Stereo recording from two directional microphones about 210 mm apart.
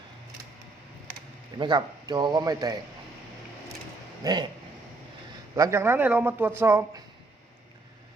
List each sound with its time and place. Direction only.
1.5 s a man's voice: 20° right (ahead or behind)
4.2 s speech: 20° right (ahead or behind)
5.5 s a man's voice: 15° right (ahead or behind)